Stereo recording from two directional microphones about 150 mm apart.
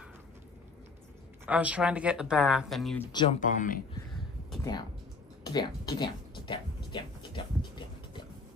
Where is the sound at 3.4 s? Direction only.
60° left (ahead or behind).